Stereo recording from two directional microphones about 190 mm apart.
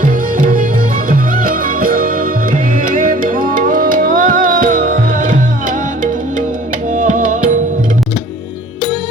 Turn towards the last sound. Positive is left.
turn(degrees=-40)  # may be behind; listen again after turning